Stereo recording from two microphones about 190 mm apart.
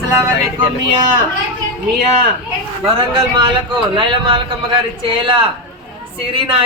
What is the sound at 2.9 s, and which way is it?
Speech, 25° right (ahead or behind).